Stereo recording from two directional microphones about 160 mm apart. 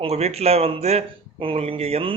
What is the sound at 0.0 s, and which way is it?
Speech, 40° right (ahead or behind).